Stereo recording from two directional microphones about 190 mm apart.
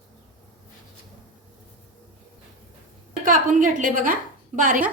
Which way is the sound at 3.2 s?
45° right (ahead or behind).